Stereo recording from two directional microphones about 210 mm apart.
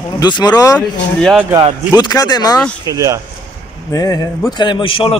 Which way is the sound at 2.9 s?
15° right (ahead or behind).